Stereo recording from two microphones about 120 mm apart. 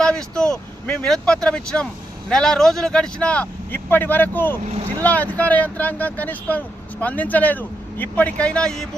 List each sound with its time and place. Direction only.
0.0 s speech: 5° left (ahead or behind)